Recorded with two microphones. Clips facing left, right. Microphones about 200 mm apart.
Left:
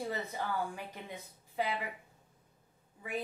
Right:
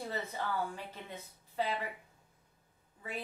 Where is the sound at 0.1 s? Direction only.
15° left (ahead or behind).